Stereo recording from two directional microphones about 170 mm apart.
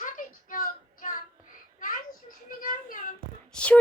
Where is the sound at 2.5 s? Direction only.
55° left (ahead or behind).